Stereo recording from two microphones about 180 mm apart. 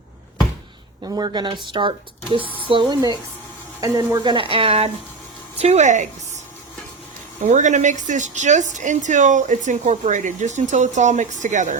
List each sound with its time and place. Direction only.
1.1 s speech: 25° right (ahead or behind); by 6.1 s 40° right (ahead or behind)
7.4 s a woman's voice: 40° right (ahead or behind)